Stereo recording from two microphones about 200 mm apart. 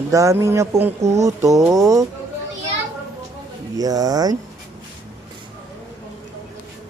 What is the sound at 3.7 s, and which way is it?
Speech, 20° right (ahead or behind).